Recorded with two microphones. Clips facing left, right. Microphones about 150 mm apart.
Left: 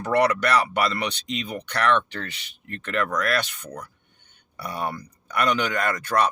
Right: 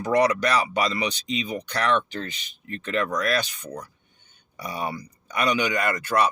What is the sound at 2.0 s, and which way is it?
Speech, 65° left (ahead or behind).